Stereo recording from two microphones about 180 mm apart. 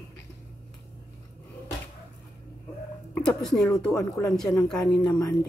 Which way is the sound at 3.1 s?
5° left (ahead or behind).